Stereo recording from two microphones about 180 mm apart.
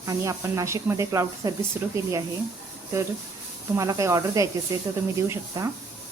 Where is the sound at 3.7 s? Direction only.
15° right (ahead or behind).